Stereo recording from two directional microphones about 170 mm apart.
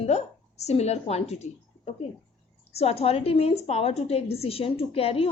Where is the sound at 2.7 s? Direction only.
35° left (ahead or behind).